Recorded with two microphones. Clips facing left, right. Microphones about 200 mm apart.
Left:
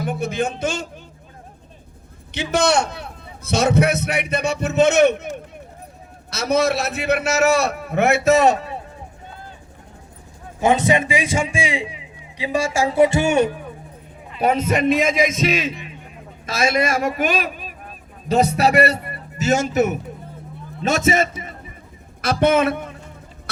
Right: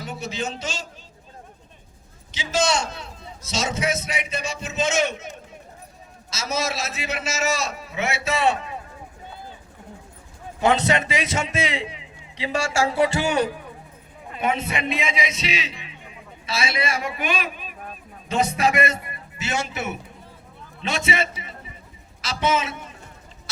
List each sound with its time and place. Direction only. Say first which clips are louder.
0.0 s a man's voice: left 7 dB; 55° left (ahead or behind)
2.3 s a man's voice: left 5 dB; 60° left (ahead or behind)
6.3 s a man's voice: left 8 dB; 60° left (ahead or behind); by 8.8 s 35° left (ahead or behind)
10.6 s a man's voice: left 3 dB; 15° left (ahead or behind)
14.3 s a man's voice: left 6 dB; 40° left (ahead or behind); by 23.0 s 55° left (ahead or behind)